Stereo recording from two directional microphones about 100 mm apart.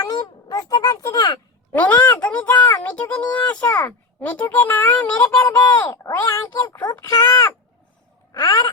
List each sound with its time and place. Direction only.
0.0 s speech: 40° left (ahead or behind)
1.7 s speech: 15° left (ahead or behind)
5.5 s speech: 45° left (ahead or behind)
6.1 s speech: 25° left (ahead or behind)
8.4 s speech: 50° left (ahead or behind)